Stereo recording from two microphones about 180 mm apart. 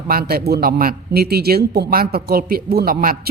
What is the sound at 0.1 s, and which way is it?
A man's voice, 55° right (ahead or behind).